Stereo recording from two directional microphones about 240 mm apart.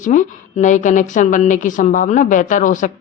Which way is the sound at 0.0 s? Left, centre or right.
Left.